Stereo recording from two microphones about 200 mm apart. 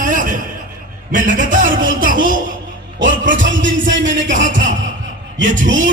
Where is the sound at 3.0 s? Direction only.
70° right (ahead or behind).